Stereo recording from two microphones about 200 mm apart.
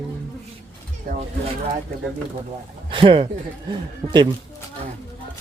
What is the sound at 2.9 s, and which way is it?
Speech, 25° right (ahead or behind).